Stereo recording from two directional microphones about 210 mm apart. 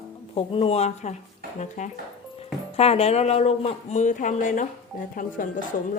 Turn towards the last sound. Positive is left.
turn(degrees=40)  # may be behind; listen again after turning